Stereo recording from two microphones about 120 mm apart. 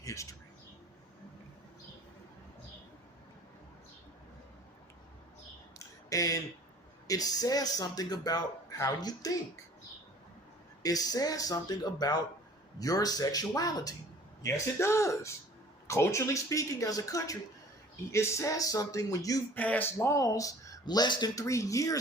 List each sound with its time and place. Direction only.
0.0 s speech: 25° left (ahead or behind)
6.1 s speech: 30° left (ahead or behind)
10.8 s speech: 30° left (ahead or behind)
19.5 s speech: 15° left (ahead or behind)